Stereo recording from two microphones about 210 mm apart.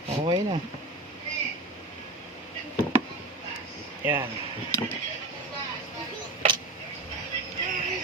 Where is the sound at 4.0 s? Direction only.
10° right (ahead or behind).